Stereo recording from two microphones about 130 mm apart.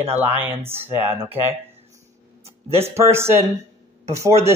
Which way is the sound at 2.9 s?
20° right (ahead or behind).